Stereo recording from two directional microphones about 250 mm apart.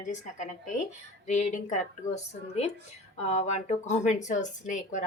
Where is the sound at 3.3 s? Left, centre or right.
Left.